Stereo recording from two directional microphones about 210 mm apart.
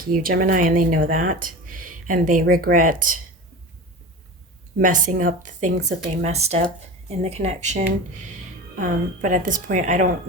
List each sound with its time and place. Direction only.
0.0 s speech: 45° right (ahead or behind)
4.8 s speech: 40° right (ahead or behind)